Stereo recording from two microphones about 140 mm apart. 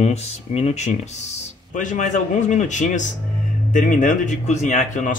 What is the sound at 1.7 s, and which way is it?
Speech, 65° left (ahead or behind).